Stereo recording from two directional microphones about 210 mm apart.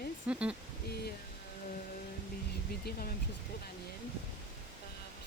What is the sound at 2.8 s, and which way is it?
Speech, 45° left (ahead or behind).